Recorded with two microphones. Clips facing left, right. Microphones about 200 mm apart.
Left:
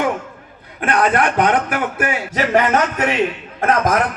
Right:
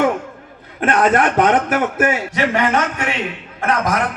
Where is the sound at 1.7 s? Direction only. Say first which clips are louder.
Right 4 dB; 45° right (ahead or behind).